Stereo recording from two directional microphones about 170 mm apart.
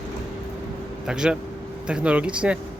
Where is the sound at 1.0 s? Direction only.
5° right (ahead or behind).